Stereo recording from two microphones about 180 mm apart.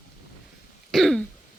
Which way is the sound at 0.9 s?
Centre (ahead or behind).